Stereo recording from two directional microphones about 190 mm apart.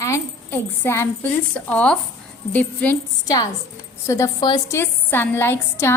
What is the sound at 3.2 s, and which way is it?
A woman's voice, 20° left (ahead or behind).